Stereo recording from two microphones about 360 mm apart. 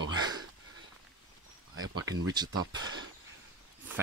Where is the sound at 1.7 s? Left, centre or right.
Right.